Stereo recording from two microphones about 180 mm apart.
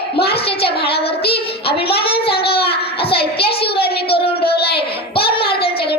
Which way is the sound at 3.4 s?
60° left (ahead or behind).